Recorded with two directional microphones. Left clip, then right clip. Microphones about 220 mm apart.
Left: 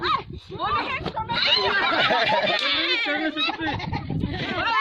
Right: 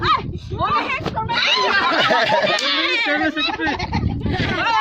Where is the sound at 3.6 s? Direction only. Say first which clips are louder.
Right 6 dB; 50° right (ahead or behind).